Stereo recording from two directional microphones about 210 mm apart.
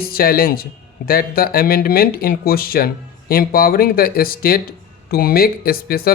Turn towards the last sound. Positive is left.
turn(degrees=45)  # may be behind; listen again after turning